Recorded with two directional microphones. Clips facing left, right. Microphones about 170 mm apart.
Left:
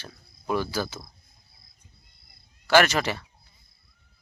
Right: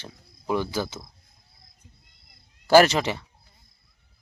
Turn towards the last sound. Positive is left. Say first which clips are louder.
# right 1 dB
turn(degrees=-20)  # may be behind; listen again after turning